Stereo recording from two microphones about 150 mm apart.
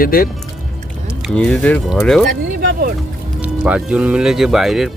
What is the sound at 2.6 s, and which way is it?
Vehicle, 85° right.